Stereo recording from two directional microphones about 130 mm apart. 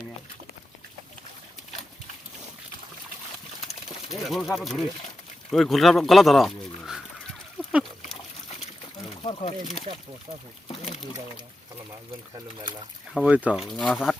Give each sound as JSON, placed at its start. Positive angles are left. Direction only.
{"t": 4.1, "sound": "speech", "side_deg": 0}
{"t": 9.2, "sound": "speech", "side_deg": 45}
{"t": 13.2, "sound": "speech", "side_deg": -10}
{"t": 13.6, "sound": "speech", "side_deg": 5}